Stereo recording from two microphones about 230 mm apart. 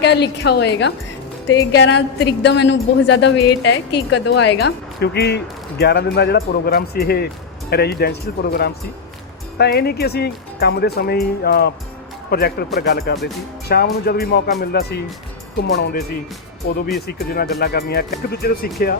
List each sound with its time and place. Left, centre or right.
0.0 s a woman's voice: left